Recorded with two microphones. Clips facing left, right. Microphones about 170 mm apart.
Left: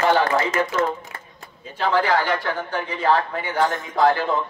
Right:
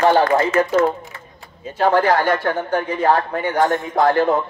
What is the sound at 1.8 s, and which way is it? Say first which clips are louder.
A man's voice: right 4 dB; 45° right (ahead or behind).